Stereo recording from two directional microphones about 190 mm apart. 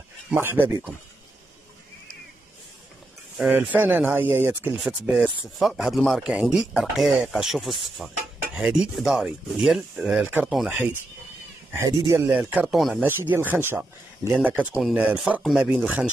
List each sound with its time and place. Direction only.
0.3 s speech: 10° right (ahead or behind)
3.3 s speech: 5° right (ahead or behind)
12.4 s speech: 5° right (ahead or behind)